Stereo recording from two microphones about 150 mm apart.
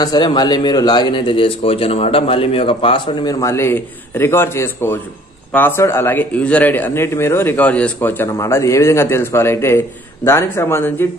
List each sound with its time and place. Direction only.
0.0 s a man's voice: 30° left (ahead or behind)